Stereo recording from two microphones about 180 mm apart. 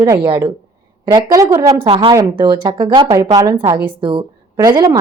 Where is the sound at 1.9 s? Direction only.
30° right (ahead or behind).